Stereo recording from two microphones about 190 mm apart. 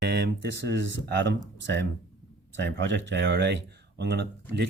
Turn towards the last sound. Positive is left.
turn(degrees=-65)  # may be behind; listen again after turning